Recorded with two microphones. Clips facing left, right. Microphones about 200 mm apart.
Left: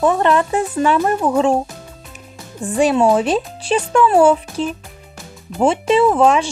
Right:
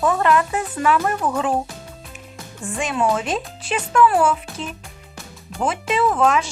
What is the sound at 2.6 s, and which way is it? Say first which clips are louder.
A child's voice: left 8 dB; 35° left (ahead or behind).